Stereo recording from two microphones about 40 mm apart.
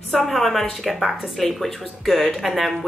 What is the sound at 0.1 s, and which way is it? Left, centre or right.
Speech, centre.